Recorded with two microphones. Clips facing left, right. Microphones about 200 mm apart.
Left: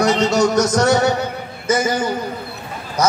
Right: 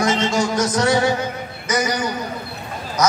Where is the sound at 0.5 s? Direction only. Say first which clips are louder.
Left 3 dB; 45° left (ahead or behind).